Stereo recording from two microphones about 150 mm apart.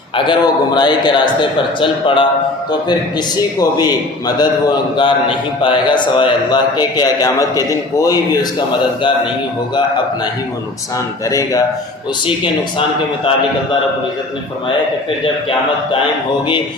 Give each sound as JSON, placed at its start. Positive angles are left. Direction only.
{"t": 0.3, "sound": "a man's voice", "side_deg": 30}
{"t": 3.3, "sound": "a man's voice", "side_deg": 25}
{"t": 4.9, "sound": "a man's voice", "side_deg": 35}
{"t": 11.3, "sound": "a man's voice", "side_deg": 20}
{"t": 15.2, "sound": "a man's voice", "side_deg": 35}